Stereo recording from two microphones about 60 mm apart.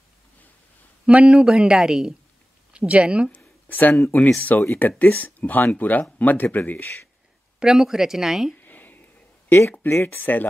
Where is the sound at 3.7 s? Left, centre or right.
Left.